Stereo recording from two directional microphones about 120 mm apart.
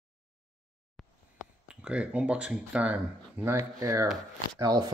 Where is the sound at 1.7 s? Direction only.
10° right (ahead or behind).